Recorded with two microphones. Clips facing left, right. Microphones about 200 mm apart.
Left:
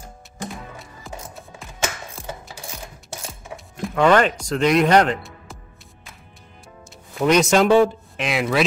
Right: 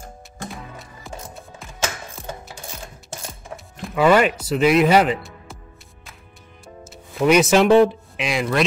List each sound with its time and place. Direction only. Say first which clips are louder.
0.7 s music: even; centre (ahead or behind)
3.3 s music: even; centre (ahead or behind)
6.8 s speech: right 2 dB; centre (ahead or behind)